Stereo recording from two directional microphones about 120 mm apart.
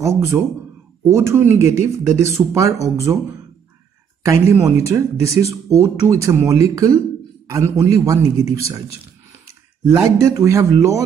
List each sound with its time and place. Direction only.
0.0 s speech: 25° right (ahead or behind)
4.2 s speech: 25° right (ahead or behind)
9.8 s speech: 20° right (ahead or behind)